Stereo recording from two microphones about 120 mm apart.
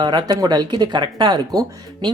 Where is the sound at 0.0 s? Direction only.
35° right (ahead or behind).